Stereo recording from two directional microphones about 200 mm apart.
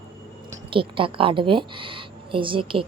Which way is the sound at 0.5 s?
25° right (ahead or behind).